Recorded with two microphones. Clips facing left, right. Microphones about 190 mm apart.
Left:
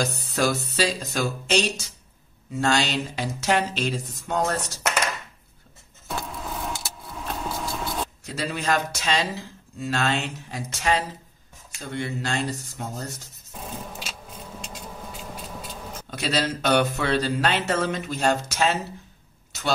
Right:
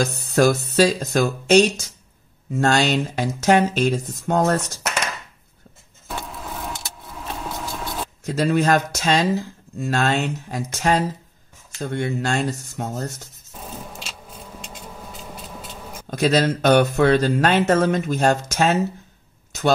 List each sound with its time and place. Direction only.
0.0 s speech: 45° right (ahead or behind)
6.0 s vehicle: centre (ahead or behind)
8.4 s speech: 45° right (ahead or behind)
13.6 s a sound: 5° right (ahead or behind)
16.1 s speech: 45° right (ahead or behind)